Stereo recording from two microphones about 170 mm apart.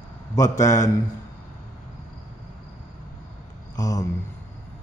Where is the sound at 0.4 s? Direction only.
20° left (ahead or behind).